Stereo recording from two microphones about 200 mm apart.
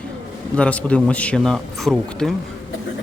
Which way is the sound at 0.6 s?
5° left (ahead or behind).